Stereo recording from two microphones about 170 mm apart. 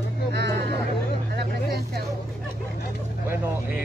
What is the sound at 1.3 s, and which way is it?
Speech, 65° right (ahead or behind).